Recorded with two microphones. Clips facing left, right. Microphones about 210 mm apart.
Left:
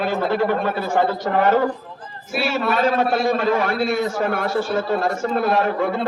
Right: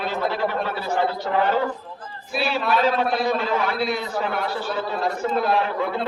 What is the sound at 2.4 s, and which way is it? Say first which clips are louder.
A man's voice: left 1 dB; 45° left (ahead or behind).